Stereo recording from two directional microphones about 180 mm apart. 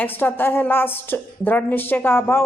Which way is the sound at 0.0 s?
10° left (ahead or behind).